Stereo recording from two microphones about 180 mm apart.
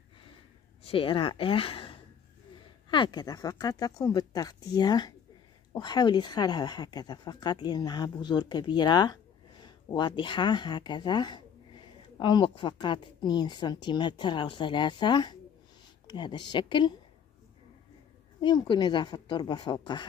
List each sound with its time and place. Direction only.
0.8 s speech: 30° left (ahead or behind)
18.4 s speech: 25° left (ahead or behind)